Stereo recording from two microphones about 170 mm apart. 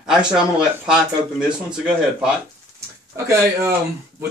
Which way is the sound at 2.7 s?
15° right (ahead or behind).